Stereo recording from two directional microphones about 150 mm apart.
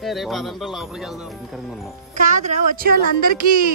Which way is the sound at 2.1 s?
55° right (ahead or behind).